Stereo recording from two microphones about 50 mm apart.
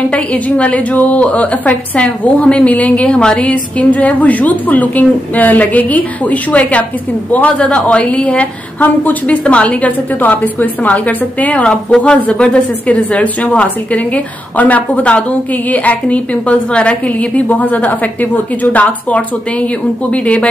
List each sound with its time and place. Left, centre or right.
0.1 s a woman's voice: left
8.7 s a woman's voice: left